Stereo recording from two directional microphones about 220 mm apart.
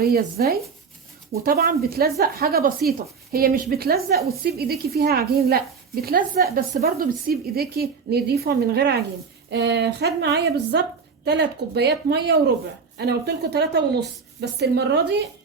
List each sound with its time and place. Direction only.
0.0 s a woman's voice: 45° right (ahead or behind)